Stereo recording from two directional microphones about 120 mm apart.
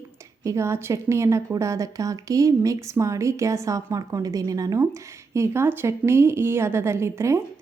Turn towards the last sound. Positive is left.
turn(degrees=-25)  # may be behind; listen again after turning